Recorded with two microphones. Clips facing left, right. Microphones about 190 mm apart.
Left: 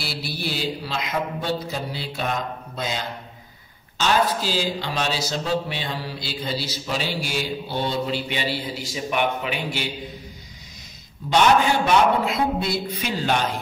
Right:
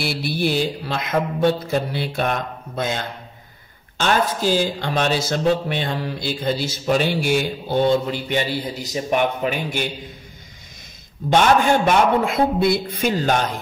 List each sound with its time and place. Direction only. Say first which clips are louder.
0.0 s mantra: right 8 dB; 55° right (ahead or behind)
4.0 s speech: right 2 dB; 55° right (ahead or behind)
11.2 s speech: right 2 dB; 50° right (ahead or behind)